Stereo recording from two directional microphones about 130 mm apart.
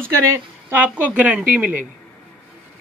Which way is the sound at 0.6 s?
15° right (ahead or behind).